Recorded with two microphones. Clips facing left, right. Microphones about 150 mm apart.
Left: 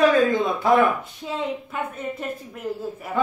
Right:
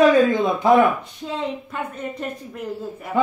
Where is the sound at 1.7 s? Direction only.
5° left (ahead or behind).